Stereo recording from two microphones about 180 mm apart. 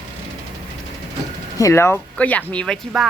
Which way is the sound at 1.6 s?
15° left (ahead or behind).